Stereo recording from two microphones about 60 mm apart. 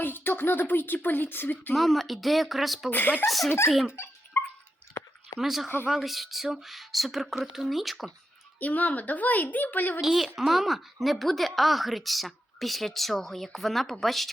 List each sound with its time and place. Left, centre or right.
0.0 s a woman's voice: left
1.7 s a woman's voice: centre
2.9 s a woman's voice: left
3.2 s a woman's voice: centre
4.4 s dog: left
5.4 s a woman's voice: centre
8.5 s a woman's voice: left
10.0 s a woman's voice: centre